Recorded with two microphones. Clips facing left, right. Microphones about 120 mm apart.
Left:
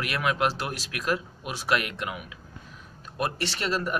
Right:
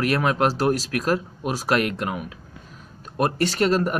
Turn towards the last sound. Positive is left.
turn(degrees=-45)  # may be behind; listen again after turning